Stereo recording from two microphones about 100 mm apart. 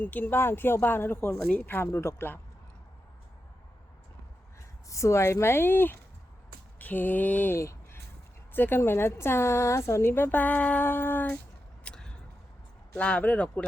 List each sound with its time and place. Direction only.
0.0 s a woman's voice: 20° left (ahead or behind)
4.9 s a woman's voice: 30° left (ahead or behind)
11.8 s vehicle: 10° left (ahead or behind)
13.0 s speech: 10° left (ahead or behind)